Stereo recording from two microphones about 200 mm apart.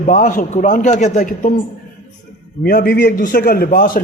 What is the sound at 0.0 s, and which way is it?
A man's voice, 40° left (ahead or behind).